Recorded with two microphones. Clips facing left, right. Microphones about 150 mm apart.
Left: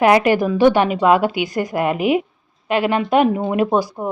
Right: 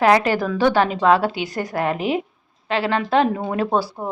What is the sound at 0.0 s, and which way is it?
Speech, 15° left (ahead or behind).